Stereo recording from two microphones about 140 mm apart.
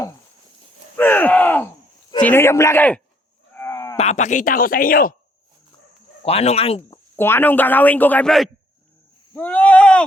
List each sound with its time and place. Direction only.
0.9 s crowd: 15° left (ahead or behind)
2.2 s a man's voice: 15° left (ahead or behind)
3.5 s cattle: 15° left (ahead or behind)
3.9 s speech: 55° left (ahead or behind); by 5.1 s 90° left
6.2 s speech: 45° left (ahead or behind)
7.2 s a man's voice: 15° left (ahead or behind)
9.3 s a sound: 10° left (ahead or behind)